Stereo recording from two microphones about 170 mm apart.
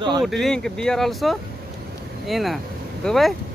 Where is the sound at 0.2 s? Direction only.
Centre (ahead or behind).